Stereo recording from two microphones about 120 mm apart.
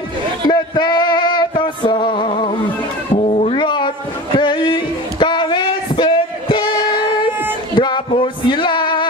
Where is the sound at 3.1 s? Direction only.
55° left (ahead or behind).